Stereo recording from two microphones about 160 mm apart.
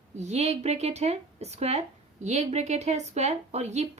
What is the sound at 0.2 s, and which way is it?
Speech, 45° right (ahead or behind).